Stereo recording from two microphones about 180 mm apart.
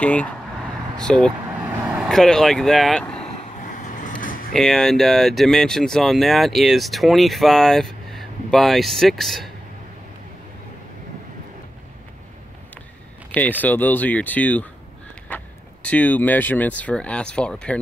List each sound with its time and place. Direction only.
0.0 s speech: 5° left (ahead or behind)
3.9 s vehicle: 45° left (ahead or behind)
4.6 s speech: 5° left (ahead or behind)
13.3 s speech: 10° left (ahead or behind)